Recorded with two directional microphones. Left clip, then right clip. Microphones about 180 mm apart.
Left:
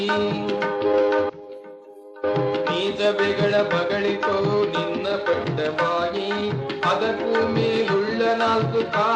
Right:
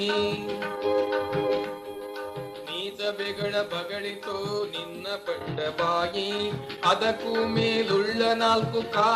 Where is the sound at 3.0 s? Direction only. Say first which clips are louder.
Left 9 dB; 40° right (ahead or behind).